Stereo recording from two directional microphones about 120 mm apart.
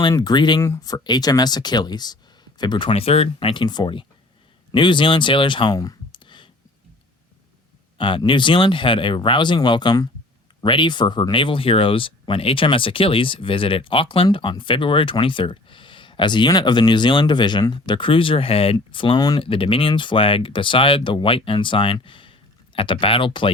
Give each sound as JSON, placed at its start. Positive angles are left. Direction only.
{"t": 0.2, "sound": "speech", "side_deg": 35}
{"t": 2.9, "sound": "speech", "side_deg": 60}
{"t": 3.5, "sound": "speech", "side_deg": 40}
{"t": 7.9, "sound": "speech", "side_deg": 45}
{"t": 19.4, "sound": "speech", "side_deg": 50}